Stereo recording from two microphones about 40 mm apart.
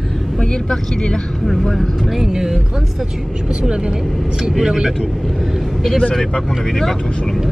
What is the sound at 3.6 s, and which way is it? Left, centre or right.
Speech, centre.